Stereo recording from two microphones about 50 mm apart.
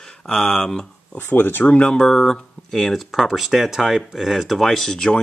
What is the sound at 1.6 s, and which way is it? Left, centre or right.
Speech, left.